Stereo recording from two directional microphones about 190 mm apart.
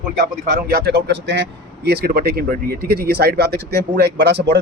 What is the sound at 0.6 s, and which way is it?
Speech, 55° right (ahead or behind).